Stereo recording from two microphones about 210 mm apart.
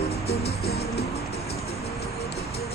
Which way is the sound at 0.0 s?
30° left (ahead or behind).